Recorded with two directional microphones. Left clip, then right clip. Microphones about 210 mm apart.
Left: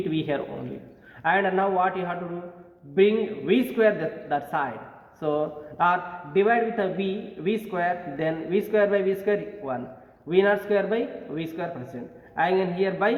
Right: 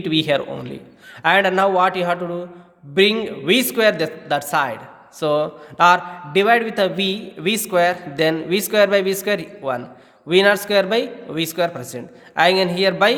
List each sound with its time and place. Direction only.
0.1 s a man's voice: 55° right (ahead or behind)